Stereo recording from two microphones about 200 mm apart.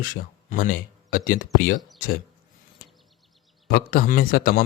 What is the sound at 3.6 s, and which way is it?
Speech, 50° left (ahead or behind).